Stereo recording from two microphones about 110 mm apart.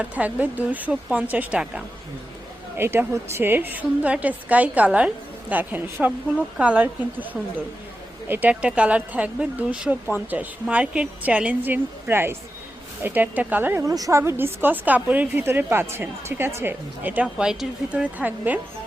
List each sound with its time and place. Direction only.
0.0 s speech: 15° right (ahead or behind)
2.7 s speech: 20° right (ahead or behind)
8.3 s speech: 15° right (ahead or behind)
13.8 s speech: 35° right (ahead or behind); by 18.6 s 15° right (ahead or behind)